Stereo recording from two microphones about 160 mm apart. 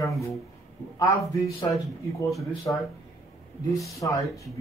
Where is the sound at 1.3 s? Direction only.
20° left (ahead or behind).